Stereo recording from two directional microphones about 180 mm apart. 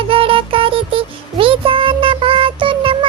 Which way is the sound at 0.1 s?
30° right (ahead or behind).